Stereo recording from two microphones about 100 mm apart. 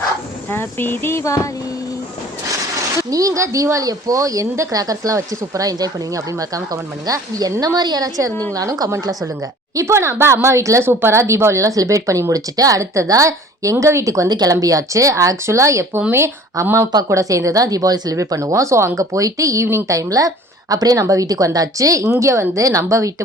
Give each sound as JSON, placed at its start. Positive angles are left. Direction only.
{"t": 0.5, "sound": "speech", "side_deg": 20}
{"t": 3.1, "sound": "speech", "side_deg": -35}
{"t": 9.7, "sound": "speech", "side_deg": -25}